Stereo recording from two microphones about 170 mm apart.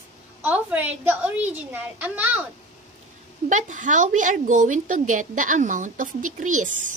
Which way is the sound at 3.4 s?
45° right (ahead or behind).